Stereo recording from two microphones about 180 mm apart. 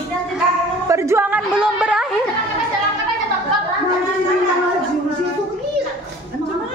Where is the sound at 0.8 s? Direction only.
15° right (ahead or behind).